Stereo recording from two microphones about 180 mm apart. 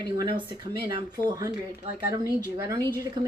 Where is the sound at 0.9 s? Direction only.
25° right (ahead or behind).